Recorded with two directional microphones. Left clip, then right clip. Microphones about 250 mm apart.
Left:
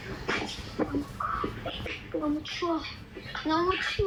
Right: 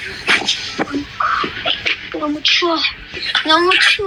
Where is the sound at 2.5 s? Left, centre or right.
Right.